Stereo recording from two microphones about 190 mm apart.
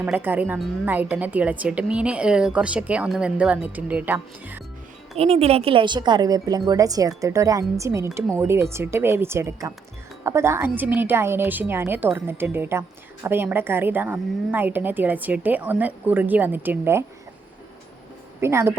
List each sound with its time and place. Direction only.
0.0 s a woman's voice: 10° right (ahead or behind)
5.1 s a woman's voice: 30° right (ahead or behind); by 17.0 s 10° right (ahead or behind)
18.3 s a woman's voice: 15° right (ahead or behind)